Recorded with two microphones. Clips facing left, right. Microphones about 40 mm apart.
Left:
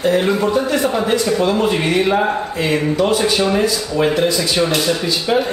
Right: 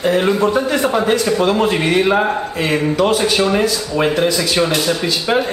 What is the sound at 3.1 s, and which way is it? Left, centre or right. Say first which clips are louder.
Speech: right 1 dB; right.